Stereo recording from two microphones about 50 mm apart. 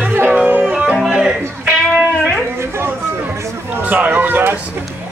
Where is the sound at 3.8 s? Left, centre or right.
Right.